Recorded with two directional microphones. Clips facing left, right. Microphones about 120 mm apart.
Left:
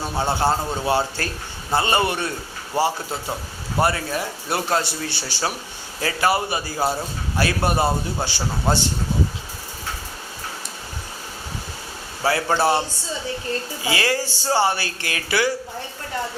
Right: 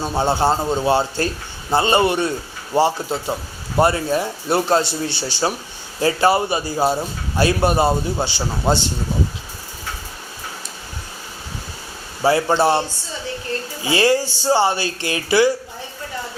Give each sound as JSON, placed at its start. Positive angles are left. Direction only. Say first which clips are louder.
{"t": 0.0, "sound": "a man's voice", "louder": "right 3 dB", "side_deg": -25}
{"t": 12.2, "sound": "a man's voice", "louder": "right 4 dB", "side_deg": -20}
{"t": 13.8, "sound": "a man's voice", "louder": "right 7 dB", "side_deg": -25}